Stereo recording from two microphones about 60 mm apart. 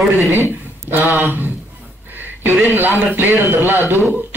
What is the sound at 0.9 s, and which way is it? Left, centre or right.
Speech, right.